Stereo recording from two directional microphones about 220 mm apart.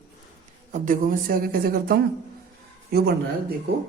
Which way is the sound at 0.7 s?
40° right (ahead or behind).